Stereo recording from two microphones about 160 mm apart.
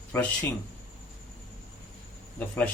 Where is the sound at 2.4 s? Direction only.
10° left (ahead or behind).